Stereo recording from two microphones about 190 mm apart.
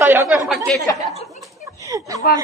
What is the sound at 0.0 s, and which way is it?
Chatter, 10° right (ahead or behind).